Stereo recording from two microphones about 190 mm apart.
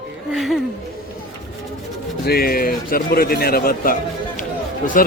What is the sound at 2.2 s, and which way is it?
A man's voice, 55° left (ahead or behind).